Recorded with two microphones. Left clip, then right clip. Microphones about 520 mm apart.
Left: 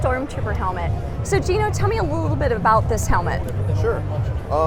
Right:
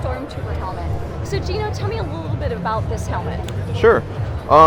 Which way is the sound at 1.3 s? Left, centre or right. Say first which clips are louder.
Left 5 dB; left.